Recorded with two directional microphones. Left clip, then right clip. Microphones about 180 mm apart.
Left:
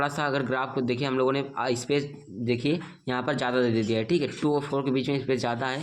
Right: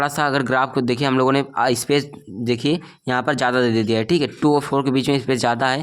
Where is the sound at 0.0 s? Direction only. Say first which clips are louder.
Right 7 dB; 50° right (ahead or behind).